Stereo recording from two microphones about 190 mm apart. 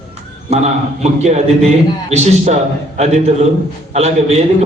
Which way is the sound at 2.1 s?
35° right (ahead or behind).